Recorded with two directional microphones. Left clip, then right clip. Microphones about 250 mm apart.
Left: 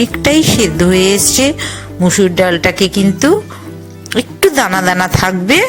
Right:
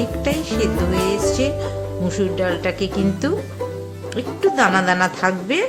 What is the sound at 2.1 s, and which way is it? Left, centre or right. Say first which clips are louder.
Speech: left 10 dB; left.